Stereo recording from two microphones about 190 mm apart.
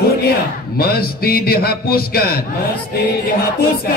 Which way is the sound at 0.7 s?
55° left (ahead or behind).